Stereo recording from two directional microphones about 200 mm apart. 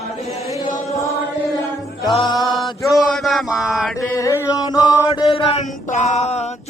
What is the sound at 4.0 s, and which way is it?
Chant, 15° left (ahead or behind).